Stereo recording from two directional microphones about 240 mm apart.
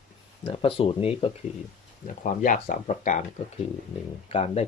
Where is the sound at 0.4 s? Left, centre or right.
Left.